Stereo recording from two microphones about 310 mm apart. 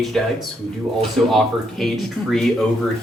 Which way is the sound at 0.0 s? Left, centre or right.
Centre.